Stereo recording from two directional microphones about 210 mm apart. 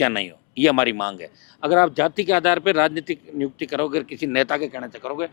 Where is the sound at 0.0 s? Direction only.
10° left (ahead or behind).